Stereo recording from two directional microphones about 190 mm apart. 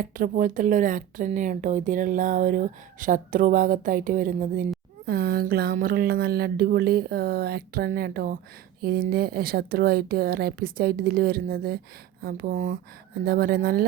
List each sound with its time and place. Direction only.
0.0 s speech: 45° right (ahead or behind)